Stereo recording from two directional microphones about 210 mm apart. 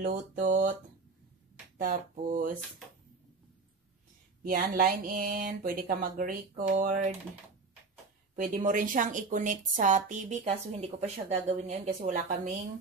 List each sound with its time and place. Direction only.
0.0 s a woman's voice: 40° right (ahead or behind)
1.8 s a woman's voice: 40° right (ahead or behind)
4.5 s speech: 45° right (ahead or behind)
8.4 s a woman's voice: 40° right (ahead or behind)